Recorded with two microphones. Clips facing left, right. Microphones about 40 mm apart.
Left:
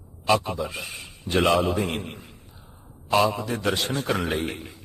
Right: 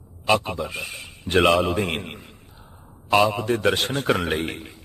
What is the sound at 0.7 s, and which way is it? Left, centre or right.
A man's voice, right.